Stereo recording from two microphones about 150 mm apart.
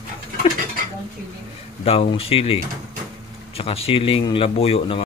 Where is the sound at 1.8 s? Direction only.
40° left (ahead or behind).